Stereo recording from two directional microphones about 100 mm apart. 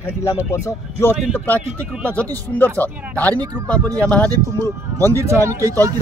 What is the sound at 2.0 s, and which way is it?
Speech, 15° left (ahead or behind).